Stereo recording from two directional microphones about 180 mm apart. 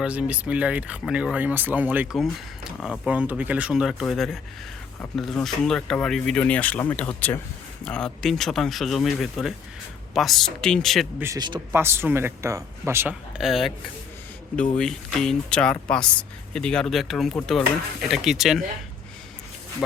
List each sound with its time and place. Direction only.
0.0 s speech: 5° right (ahead or behind)
11.2 s speech: 20° right (ahead or behind)
11.7 s speech: 15° right (ahead or behind)
13.4 s speech: centre (ahead or behind)